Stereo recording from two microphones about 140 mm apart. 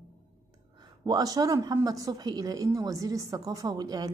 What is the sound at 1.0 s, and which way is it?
A woman's voice, 30° right (ahead or behind).